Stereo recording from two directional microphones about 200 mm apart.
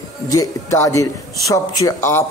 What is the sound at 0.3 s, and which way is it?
A man's voice, 15° left (ahead or behind).